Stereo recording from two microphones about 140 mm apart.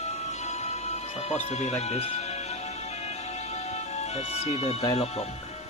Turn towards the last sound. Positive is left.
turn(degrees=50)  # may be behind; listen again after turning